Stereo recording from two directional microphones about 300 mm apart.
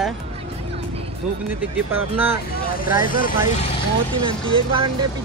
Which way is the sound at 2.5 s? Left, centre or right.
Left.